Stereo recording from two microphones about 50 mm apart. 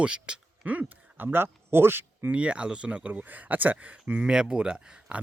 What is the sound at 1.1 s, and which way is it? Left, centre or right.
Speech, right.